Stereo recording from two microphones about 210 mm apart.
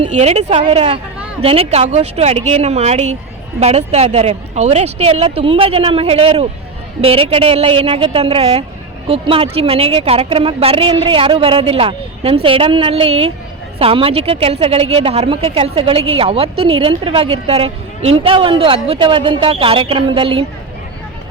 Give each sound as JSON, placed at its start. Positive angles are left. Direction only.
{"t": 0.1, "sound": "a woman's voice", "side_deg": -30}